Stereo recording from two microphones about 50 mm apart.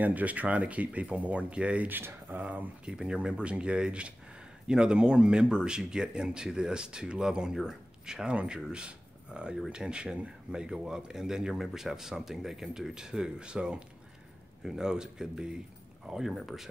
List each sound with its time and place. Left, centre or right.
0.0 s speech: right
1.9 s speech: right
2.8 s speech: centre